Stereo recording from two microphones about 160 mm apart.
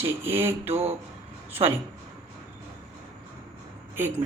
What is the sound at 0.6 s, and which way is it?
Speech, 40° right (ahead or behind).